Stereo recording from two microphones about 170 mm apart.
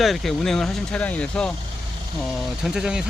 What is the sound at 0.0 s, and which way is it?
Speech, centre (ahead or behind).